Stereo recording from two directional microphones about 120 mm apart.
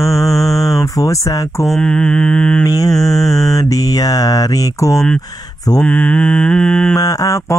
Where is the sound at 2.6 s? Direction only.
30° left (ahead or behind).